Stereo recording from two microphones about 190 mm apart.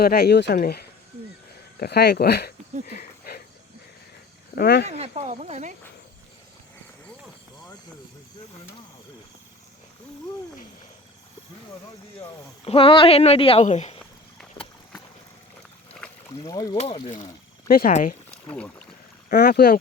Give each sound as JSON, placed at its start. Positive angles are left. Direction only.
{"t": 0.0, "sound": "speech", "side_deg": 55}
{"t": 2.8, "sound": "a sound", "side_deg": 55}
{"t": 4.5, "sound": "speech", "side_deg": 55}
{"t": 4.9, "sound": "speech", "side_deg": -35}
{"t": 12.6, "sound": "speech", "side_deg": 30}
{"t": 16.5, "sound": "speech", "side_deg": 20}
{"t": 16.7, "sound": "speech", "side_deg": 35}
{"t": 17.7, "sound": "speech", "side_deg": 50}
{"t": 18.4, "sound": "speech", "side_deg": 5}
{"t": 19.3, "sound": "speech", "side_deg": 55}